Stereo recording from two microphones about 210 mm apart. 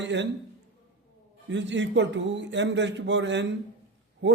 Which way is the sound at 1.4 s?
60° right (ahead or behind).